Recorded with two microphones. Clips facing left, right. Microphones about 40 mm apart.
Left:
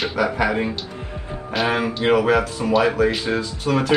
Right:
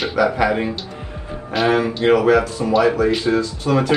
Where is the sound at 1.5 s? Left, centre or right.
Centre.